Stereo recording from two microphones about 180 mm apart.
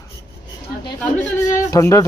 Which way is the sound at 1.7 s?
15° left (ahead or behind).